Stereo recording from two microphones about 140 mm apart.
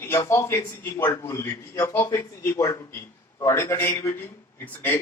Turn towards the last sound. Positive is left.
turn(degrees=15)  # may be behind; listen again after turning